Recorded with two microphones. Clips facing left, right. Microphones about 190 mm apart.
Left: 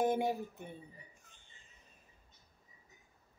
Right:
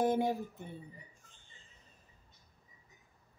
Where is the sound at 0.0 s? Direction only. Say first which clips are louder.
Right 1 dB; 15° left (ahead or behind).